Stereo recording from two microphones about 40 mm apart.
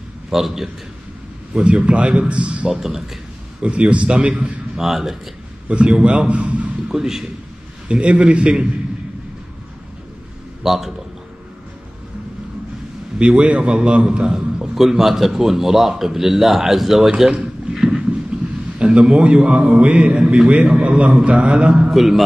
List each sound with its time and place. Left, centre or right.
0.3 s a man's voice: centre
1.5 s a man's voice: right
2.7 s a man's voice: centre
3.6 s a man's voice: right
4.7 s a man's voice: centre
5.7 s a man's voice: right
6.9 s a man's voice: centre
7.9 s a man's voice: right
10.6 s a man's voice: centre
13.2 s a man's voice: right
14.3 s a man's voice: centre
17.2 s a sound: centre
18.8 s a man's voice: right
21.9 s a man's voice: centre